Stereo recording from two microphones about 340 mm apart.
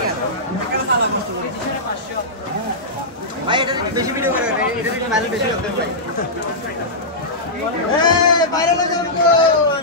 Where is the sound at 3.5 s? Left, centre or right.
Centre.